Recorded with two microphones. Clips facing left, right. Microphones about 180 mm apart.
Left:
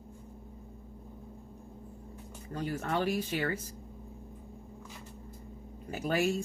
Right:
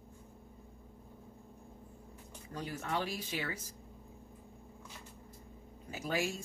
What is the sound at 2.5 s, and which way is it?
Speech, 50° left (ahead or behind).